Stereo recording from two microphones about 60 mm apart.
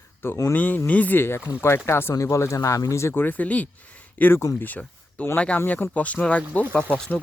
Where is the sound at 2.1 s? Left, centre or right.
Left.